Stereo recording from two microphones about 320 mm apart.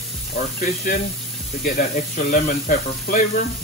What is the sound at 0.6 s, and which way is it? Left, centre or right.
Speech, left.